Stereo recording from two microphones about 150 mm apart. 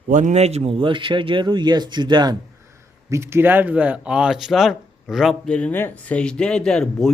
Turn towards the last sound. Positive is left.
turn(degrees=5)  # may be behind; listen again after turning